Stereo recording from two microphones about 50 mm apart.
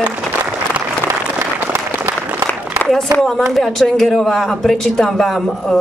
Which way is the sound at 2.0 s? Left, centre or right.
Right.